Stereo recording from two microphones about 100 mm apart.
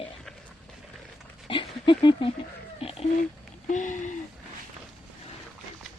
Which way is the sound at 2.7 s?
70° left (ahead or behind).